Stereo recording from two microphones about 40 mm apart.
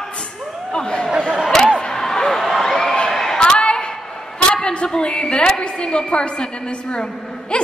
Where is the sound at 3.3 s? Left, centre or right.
Left.